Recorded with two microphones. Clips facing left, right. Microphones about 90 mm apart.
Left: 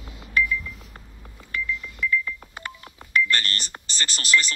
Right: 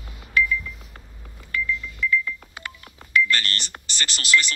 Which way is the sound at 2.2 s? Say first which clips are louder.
Right 1 dB; 20° left (ahead or behind).